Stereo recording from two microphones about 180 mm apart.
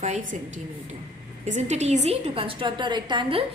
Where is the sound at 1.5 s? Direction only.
40° right (ahead or behind).